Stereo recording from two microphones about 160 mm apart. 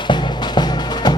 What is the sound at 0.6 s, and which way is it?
Music, 25° left (ahead or behind).